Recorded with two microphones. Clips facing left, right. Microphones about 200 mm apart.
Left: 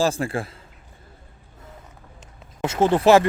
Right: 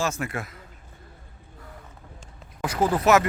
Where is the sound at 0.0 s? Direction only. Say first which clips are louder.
Left 6 dB; 30° left (ahead or behind).